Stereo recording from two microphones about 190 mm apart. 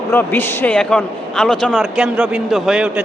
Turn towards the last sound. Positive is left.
turn(degrees=-5)  # may be behind; listen again after turning